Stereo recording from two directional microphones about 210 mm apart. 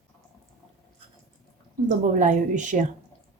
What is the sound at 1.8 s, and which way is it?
Speech, 35° right (ahead or behind).